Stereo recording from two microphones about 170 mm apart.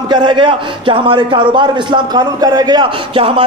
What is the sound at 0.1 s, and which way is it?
Speech, 25° right (ahead or behind).